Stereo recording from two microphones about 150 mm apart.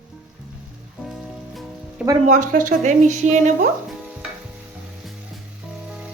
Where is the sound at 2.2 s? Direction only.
55° right (ahead or behind).